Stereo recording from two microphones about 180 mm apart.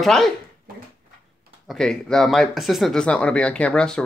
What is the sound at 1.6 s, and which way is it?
Speech, centre (ahead or behind).